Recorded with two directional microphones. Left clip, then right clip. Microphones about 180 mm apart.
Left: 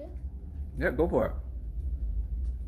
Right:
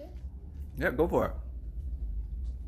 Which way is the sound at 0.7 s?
15° right (ahead or behind).